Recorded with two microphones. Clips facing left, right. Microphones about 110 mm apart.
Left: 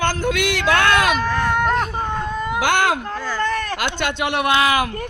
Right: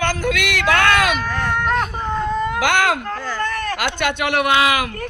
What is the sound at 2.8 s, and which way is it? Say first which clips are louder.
Speech: even; 25° left (ahead or behind).